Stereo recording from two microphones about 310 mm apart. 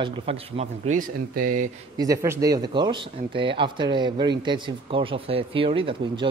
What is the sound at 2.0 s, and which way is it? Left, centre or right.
Speech, centre.